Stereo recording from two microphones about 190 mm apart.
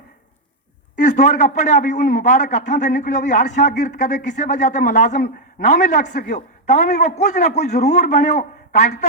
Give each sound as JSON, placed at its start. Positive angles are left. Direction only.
{"t": 0.9, "sound": "a man's voice", "side_deg": 40}